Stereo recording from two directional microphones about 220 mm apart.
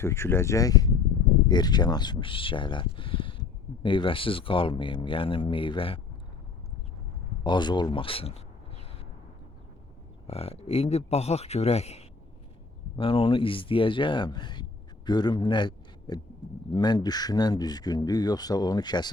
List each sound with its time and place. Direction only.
0.0 s speech: 10° left (ahead or behind)
7.4 s speech: 20° left (ahead or behind)
10.2 s speech: 25° left (ahead or behind)